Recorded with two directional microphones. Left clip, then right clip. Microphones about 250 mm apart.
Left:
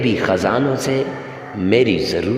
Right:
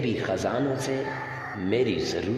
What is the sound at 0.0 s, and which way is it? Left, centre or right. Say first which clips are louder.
A man's voice: left 10 dB; left.